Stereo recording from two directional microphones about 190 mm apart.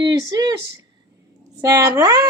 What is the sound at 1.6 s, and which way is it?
Speech, 15° right (ahead or behind).